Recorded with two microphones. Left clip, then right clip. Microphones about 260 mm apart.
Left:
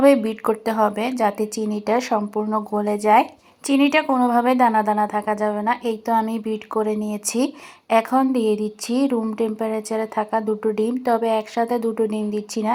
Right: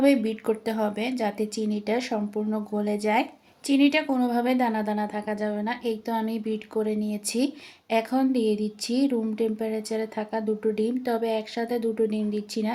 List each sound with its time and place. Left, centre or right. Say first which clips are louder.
0.1 s a woman's voice: left 6 dB; centre
8.4 s speech: left 5 dB; left
8.8 s a woman's voice: left 4 dB; centre